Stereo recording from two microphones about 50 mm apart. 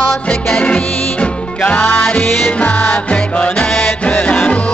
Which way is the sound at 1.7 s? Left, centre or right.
Left.